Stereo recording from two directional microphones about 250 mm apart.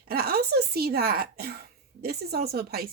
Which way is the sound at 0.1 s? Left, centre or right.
Right.